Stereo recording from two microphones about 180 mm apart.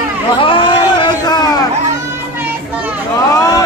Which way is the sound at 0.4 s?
30° left (ahead or behind).